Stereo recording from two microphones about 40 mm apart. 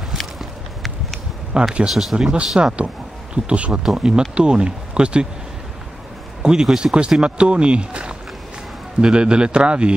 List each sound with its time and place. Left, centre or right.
1.5 s speech: right
1.9 s speech: centre
2.1 s speech: right
3.4 s speech: right
3.8 s speech: centre
6.4 s speech: centre